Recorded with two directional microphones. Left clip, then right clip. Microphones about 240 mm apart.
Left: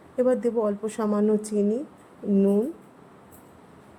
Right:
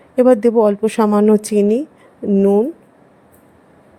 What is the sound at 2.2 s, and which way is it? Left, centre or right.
Speech, right.